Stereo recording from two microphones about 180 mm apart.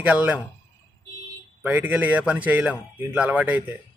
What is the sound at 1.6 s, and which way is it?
Speech, 10° right (ahead or behind).